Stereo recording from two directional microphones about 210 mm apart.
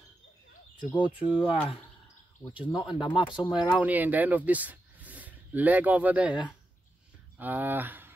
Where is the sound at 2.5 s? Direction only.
25° left (ahead or behind).